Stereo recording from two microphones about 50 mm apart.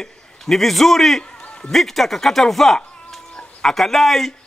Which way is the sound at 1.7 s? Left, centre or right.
Centre.